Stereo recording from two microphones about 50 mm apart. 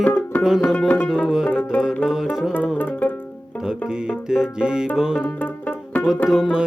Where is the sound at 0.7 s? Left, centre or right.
Left.